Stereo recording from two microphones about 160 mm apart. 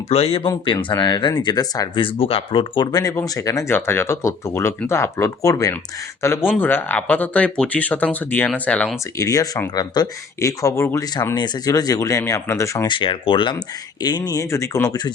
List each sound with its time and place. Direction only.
0.1 s speech: 40° left (ahead or behind)
2.0 s speech: 35° left (ahead or behind); by 9.0 s 10° left (ahead or behind)
9.1 s speech: 20° left (ahead or behind)